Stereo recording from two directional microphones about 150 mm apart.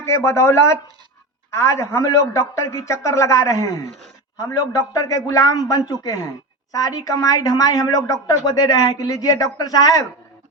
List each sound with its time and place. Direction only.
0.0 s a woman's voice: 15° left (ahead or behind)